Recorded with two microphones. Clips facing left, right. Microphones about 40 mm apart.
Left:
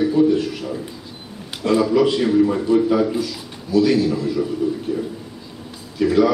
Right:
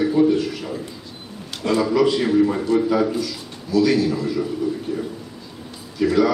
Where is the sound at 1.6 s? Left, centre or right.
Centre.